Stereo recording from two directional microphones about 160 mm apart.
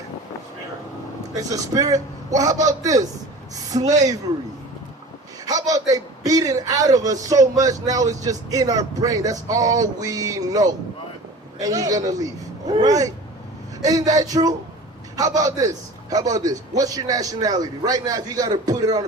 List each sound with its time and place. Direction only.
1.4 s a man's voice: 20° right (ahead or behind)
5.5 s a man's voice: 20° right (ahead or behind)